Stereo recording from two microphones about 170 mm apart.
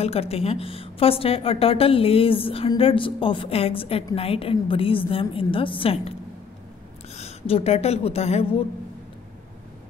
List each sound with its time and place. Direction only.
0.0 s a woman's voice: 35° left (ahead or behind)
7.2 s a woman's voice: 35° left (ahead or behind)